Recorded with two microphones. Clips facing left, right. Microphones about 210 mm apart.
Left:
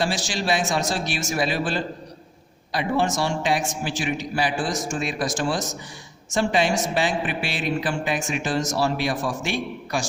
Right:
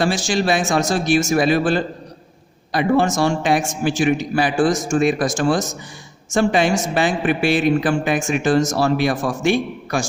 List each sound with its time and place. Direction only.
0.0 s a man's voice: 50° right (ahead or behind)